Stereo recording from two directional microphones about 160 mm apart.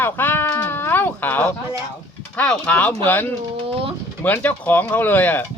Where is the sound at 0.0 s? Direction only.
10° left (ahead or behind).